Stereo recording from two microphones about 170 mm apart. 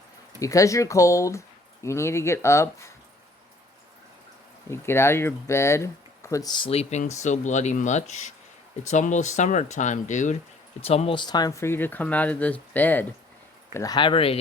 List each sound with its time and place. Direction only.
0.3 s speech: 20° left (ahead or behind)
4.7 s speech: 15° left (ahead or behind); by 10.3 s 45° left (ahead or behind)
10.8 s speech: 35° left (ahead or behind); by 13.1 s 10° left (ahead or behind)
13.7 s speech: 25° left (ahead or behind)